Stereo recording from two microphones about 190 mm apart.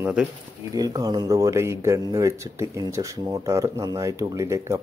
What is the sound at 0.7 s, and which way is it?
Speech, 20° right (ahead or behind).